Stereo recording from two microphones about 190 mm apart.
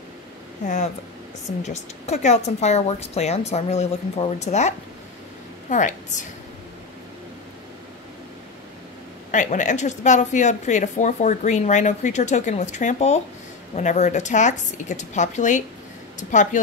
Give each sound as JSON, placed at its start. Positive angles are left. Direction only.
{"t": 1.6, "sound": "speech", "side_deg": 35}
{"t": 9.3, "sound": "speech", "side_deg": 40}